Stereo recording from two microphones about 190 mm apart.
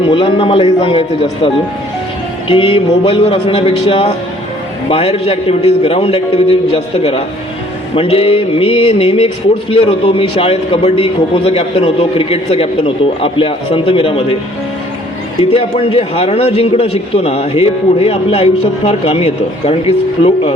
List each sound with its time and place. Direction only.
0.1 s speech: 25° left (ahead or behind)
2.5 s a man's voice: 25° left (ahead or behind)
15.5 s a man's voice: 30° left (ahead or behind)